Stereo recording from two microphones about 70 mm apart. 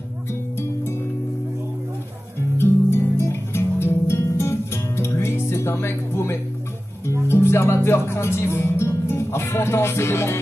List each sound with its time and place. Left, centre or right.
2.5 s music: left
7.1 s speech: left